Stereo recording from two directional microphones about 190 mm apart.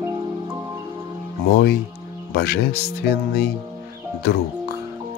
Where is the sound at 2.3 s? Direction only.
55° left (ahead or behind).